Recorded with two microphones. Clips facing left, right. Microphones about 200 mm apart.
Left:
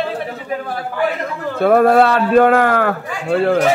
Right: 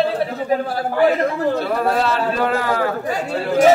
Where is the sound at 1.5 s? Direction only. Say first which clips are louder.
Left 8 dB; 55° left (ahead or behind).